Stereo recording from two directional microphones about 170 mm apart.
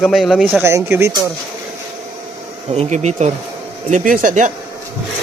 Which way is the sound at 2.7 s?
40° right (ahead or behind).